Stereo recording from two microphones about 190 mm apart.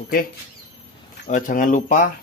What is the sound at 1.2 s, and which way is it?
Speech, 45° left (ahead or behind).